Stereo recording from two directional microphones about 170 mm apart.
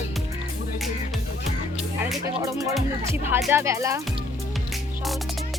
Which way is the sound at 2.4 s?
20° right (ahead or behind).